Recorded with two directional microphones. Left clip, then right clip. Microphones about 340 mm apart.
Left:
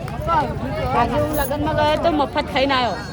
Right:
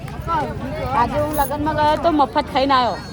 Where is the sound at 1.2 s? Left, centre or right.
Centre.